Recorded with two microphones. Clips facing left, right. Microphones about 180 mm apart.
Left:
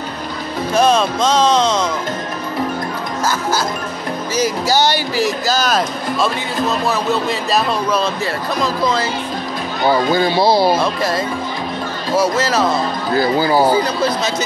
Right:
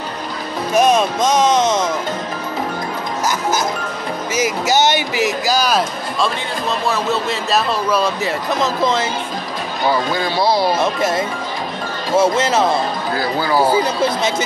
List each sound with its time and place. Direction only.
0.7 s speech: 15° right (ahead or behind)
5.5 s speech: 10° right (ahead or behind)
6.9 s speech: centre (ahead or behind)
8.5 s speech: 25° right (ahead or behind)
10.1 s speech: 30° left (ahead or behind)
10.8 s speech: 20° right (ahead or behind)
13.2 s speech: 25° left (ahead or behind)